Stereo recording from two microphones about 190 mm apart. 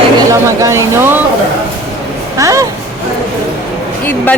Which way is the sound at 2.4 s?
15° right (ahead or behind).